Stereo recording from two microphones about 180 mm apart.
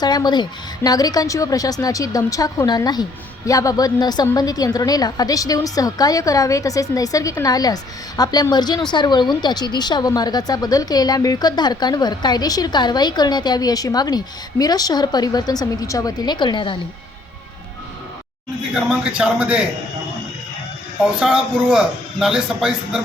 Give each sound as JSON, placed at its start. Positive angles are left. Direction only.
{"t": 0.0, "sound": "a woman's voice", "side_deg": 25}
{"t": 19.1, "sound": "a man's voice", "side_deg": -5}
{"t": 21.2, "sound": "a man's voice", "side_deg": -5}